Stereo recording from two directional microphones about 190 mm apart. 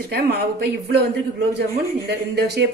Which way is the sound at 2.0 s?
60° right (ahead or behind).